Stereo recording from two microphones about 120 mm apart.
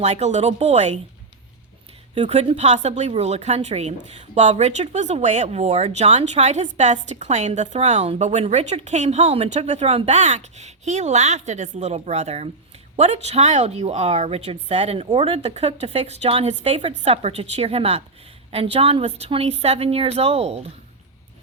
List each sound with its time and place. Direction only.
0.0 s speech: 70° right (ahead or behind)
2.3 s speech: 60° right (ahead or behind); by 3.1 s 75° right (ahead or behind)
3.1 s a woman's voice: 65° right (ahead or behind)